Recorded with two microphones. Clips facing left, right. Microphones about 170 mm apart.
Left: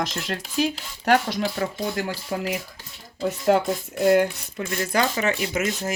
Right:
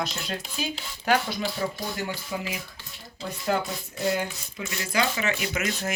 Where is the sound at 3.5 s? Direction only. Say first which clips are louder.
Left 6 dB; 60° left (ahead or behind).